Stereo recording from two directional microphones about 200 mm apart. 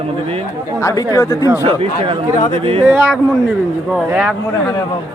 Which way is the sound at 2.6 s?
30° right (ahead or behind).